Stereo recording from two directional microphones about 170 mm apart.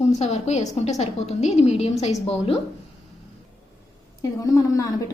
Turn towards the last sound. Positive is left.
turn(degrees=20)  # may be behind; listen again after turning